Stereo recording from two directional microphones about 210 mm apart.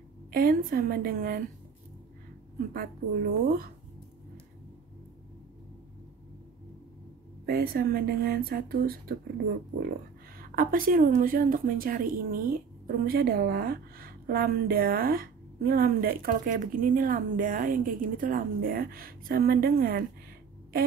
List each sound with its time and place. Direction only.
0.3 s a woman's voice: 45° right (ahead or behind)
2.7 s a woman's voice: 45° right (ahead or behind)
7.4 s a woman's voice: 45° right (ahead or behind)
10.5 s a woman's voice: 40° right (ahead or behind)